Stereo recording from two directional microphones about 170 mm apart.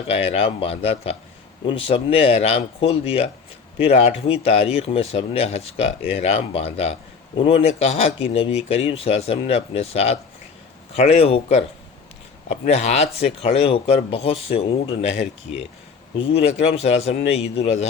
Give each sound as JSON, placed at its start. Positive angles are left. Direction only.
{"t": 0.1, "sound": "speech", "side_deg": 35}
{"t": 16.1, "sound": "speech", "side_deg": 35}